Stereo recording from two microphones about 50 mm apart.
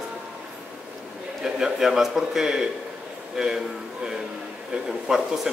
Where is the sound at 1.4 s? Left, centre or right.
Centre.